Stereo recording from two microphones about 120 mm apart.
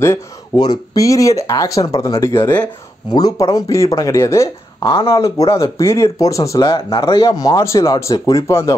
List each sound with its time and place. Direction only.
0.6 s speech: 30° left (ahead or behind)
2.6 s speech: 35° left (ahead or behind)
7.1 s speech: 45° left (ahead or behind)
7.3 s speech: 30° left (ahead or behind)